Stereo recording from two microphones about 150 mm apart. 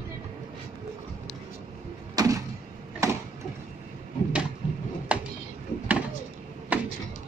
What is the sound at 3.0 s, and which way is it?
Tick-tock, 20° right (ahead or behind).